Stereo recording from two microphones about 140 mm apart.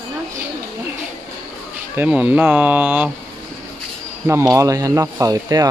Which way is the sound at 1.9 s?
10° right (ahead or behind).